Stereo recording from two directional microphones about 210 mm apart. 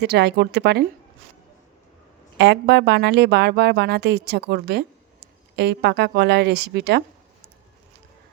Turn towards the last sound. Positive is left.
turn(degrees=-50)  # may be behind; listen again after turning